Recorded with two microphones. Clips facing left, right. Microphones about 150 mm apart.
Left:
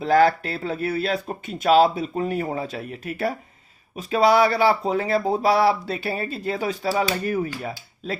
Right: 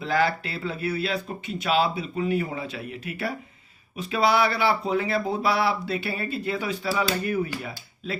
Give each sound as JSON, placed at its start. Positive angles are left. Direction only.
{"t": 0.0, "sound": "speech", "side_deg": 45}